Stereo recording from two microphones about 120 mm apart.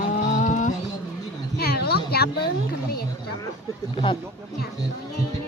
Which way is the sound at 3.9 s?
45° left (ahead or behind).